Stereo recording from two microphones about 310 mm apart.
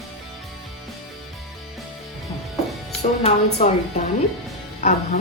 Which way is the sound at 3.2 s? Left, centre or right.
Left.